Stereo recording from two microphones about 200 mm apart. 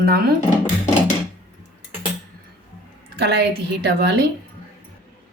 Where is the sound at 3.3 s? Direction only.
60° right (ahead or behind).